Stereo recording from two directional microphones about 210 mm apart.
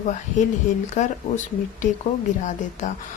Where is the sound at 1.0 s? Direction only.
35° left (ahead or behind).